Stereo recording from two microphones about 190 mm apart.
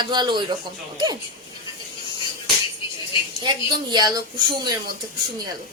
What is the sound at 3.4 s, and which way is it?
Speech, 20° right (ahead or behind).